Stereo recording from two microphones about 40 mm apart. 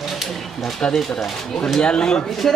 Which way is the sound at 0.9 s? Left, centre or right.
Centre.